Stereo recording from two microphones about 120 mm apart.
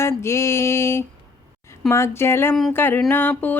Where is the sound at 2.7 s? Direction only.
15° left (ahead or behind).